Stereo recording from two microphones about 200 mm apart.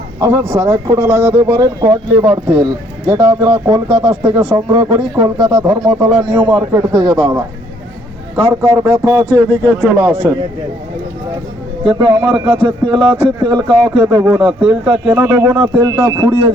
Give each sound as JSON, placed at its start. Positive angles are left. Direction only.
{"t": 0.2, "sound": "a man's voice", "side_deg": -15}
{"t": 5.8, "sound": "a man's voice", "side_deg": 0}
{"t": 6.1, "sound": "speech", "side_deg": -20}
{"t": 8.4, "sound": "a man's voice", "side_deg": -15}
{"t": 11.8, "sound": "speech", "side_deg": -25}
{"t": 12.2, "sound": "a man's voice", "side_deg": -10}
{"t": 12.6, "sound": "a man's voice", "side_deg": -25}